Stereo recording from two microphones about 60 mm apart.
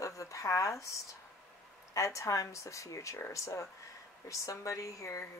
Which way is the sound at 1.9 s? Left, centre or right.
Left.